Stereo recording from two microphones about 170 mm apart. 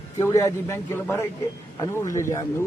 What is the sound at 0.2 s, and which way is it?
A man's voice, 15° left (ahead or behind).